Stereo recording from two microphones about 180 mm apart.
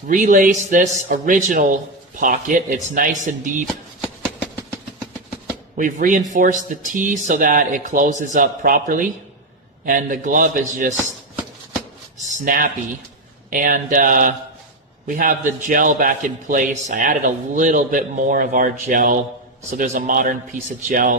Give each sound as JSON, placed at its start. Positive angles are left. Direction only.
{"t": 0.1, "sound": "a man's voice", "side_deg": -45}
{"t": 5.7, "sound": "a man's voice", "side_deg": -50}
{"t": 12.5, "sound": "a man's voice", "side_deg": -50}